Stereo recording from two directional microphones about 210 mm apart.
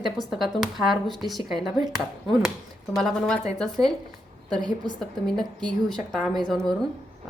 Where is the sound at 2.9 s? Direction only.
Centre (ahead or behind).